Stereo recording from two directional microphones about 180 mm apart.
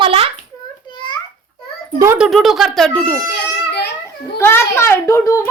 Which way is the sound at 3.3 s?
70° left (ahead or behind).